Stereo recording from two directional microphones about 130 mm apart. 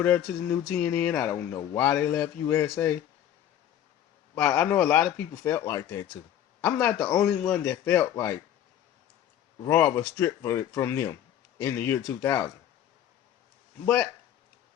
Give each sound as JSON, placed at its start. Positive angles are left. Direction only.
{"t": 0.0, "sound": "speech", "side_deg": 10}
{"t": 4.4, "sound": "speech", "side_deg": 10}
{"t": 9.6, "sound": "speech", "side_deg": 15}
{"t": 13.8, "sound": "speech", "side_deg": 5}